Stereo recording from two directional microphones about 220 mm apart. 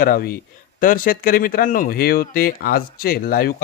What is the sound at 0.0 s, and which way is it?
A man's voice, 40° left (ahead or behind).